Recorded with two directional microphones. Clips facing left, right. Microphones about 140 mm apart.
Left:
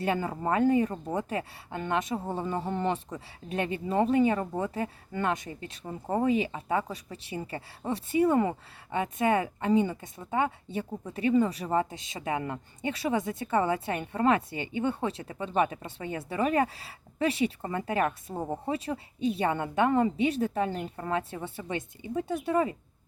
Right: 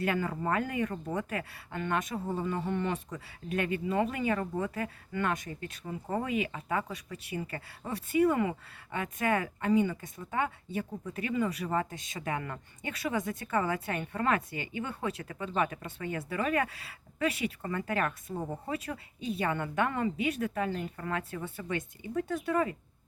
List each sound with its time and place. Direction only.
0.0 s speech: 30° left (ahead or behind)